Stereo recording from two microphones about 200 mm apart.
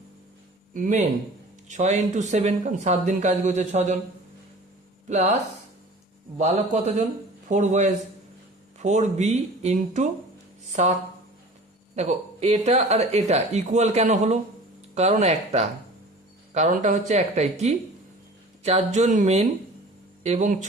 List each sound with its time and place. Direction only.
0.7 s speech: 40° right (ahead or behind)
5.0 s speech: 35° right (ahead or behind)
6.4 s speech: 35° right (ahead or behind)
11.9 s speech: 35° right (ahead or behind)